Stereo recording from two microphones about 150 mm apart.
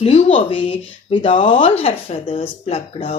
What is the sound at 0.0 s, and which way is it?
Speech, 50° left (ahead or behind).